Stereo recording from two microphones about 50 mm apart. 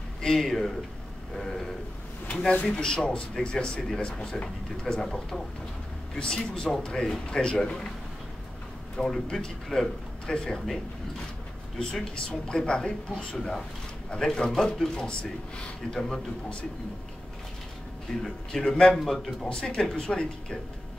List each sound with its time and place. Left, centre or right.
0.2 s speech: centre
2.2 s a sound: centre
2.5 s speech: left
2.8 s speech: centre
8.9 s speech: centre
11.8 s speech: centre
18.2 s speech: centre
19.6 s speech: centre